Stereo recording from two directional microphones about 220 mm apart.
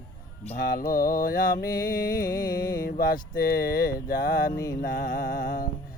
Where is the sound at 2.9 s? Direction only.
40° left (ahead or behind).